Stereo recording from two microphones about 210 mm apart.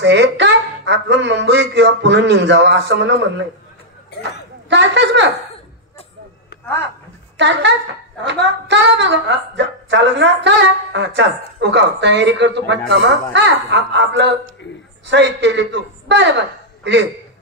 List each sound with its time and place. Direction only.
0.0 s speech: 55° right (ahead or behind)
4.6 s speech: 55° right (ahead or behind)
7.3 s a man's voice: 55° right (ahead or behind)